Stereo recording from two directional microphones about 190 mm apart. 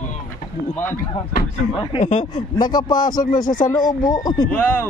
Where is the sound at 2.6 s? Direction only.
20° left (ahead or behind).